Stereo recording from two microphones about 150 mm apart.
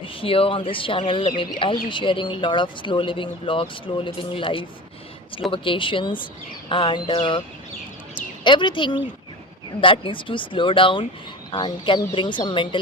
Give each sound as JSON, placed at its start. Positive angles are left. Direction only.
{"t": 0.0, "sound": "speech", "side_deg": 35}
{"t": 8.4, "sound": "speech", "side_deg": 30}